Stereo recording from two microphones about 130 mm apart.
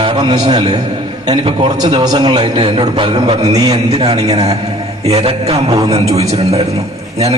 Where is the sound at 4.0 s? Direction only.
50° right (ahead or behind).